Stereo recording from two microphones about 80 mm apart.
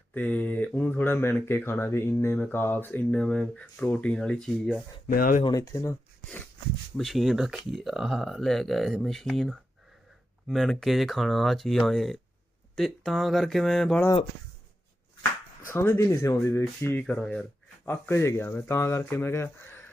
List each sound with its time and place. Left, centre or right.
0.1 s speech: centre
3.2 s speech: centre
5.5 s speech: left
6.9 s speech: centre
15.7 s speech: left
16.9 s speech: centre
17.2 s speech: centre
17.8 s a man's voice: left
18.1 s speech: left